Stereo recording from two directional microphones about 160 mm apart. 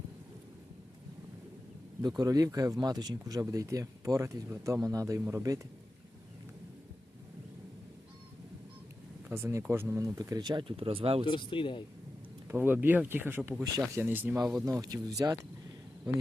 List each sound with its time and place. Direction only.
2.0 s speech: 25° right (ahead or behind)
9.3 s speech: 15° right (ahead or behind); by 11.3 s 35° right (ahead or behind)
11.3 s speech: 30° left (ahead or behind)
12.5 s speech: 15° right (ahead or behind)
14.6 s speech: 20° right (ahead or behind)